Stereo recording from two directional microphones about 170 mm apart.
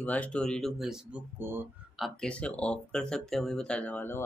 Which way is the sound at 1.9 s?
5° left (ahead or behind).